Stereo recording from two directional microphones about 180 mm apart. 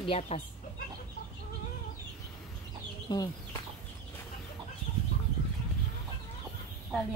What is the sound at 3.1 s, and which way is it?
Speech, 25° left (ahead or behind).